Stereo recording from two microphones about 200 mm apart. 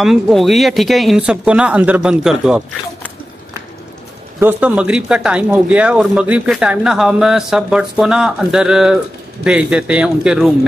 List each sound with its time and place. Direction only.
0.0 s speech: centre (ahead or behind)
4.4 s speech: 10° right (ahead or behind)